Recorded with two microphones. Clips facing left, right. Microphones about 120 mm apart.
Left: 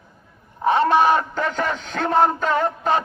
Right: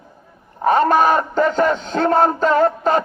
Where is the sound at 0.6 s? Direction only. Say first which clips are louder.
Right 2 dB; 45° right (ahead or behind).